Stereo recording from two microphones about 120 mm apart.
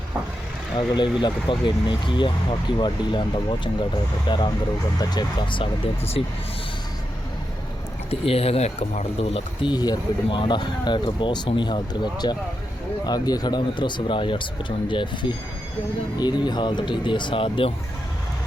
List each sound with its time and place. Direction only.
1.2 s speech: 40° left (ahead or behind)
6.2 s speech: 50° left (ahead or behind)
8.1 s speech: 55° left (ahead or behind)